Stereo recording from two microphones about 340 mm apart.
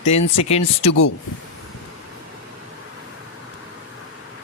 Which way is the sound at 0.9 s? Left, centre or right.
Left.